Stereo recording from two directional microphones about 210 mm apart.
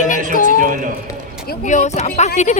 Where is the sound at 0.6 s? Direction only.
40° right (ahead or behind).